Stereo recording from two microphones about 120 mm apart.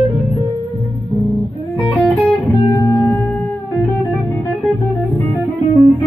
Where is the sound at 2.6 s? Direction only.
25° left (ahead or behind).